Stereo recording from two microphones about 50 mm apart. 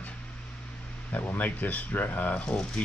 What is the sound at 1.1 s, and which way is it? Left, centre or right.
Speech, left.